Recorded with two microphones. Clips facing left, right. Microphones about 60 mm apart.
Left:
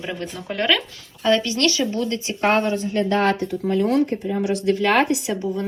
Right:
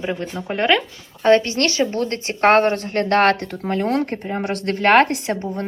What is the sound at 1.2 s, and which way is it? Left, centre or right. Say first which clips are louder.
Speech: right 4 dB; right.